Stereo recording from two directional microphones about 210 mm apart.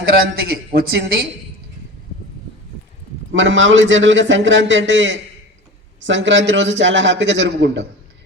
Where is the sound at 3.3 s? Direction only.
65° right (ahead or behind).